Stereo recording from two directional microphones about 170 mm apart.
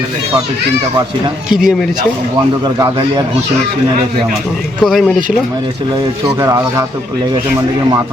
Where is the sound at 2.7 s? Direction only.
20° right (ahead or behind).